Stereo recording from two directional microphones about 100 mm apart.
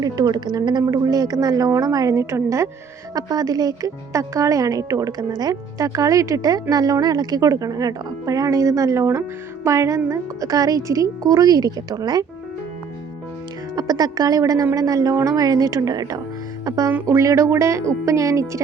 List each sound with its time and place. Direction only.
0.0 s a woman's voice: 40° right (ahead or behind)
13.7 s a woman's voice: 40° right (ahead or behind)